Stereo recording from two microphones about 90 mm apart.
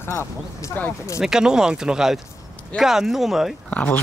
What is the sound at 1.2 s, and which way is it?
Speech, 5° right (ahead or behind).